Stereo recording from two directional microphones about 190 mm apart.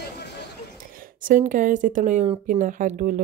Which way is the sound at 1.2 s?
45° right (ahead or behind).